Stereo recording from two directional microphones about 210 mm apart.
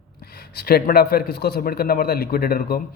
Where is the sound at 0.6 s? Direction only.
45° left (ahead or behind).